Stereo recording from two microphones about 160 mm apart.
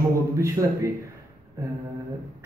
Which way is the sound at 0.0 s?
20° right (ahead or behind).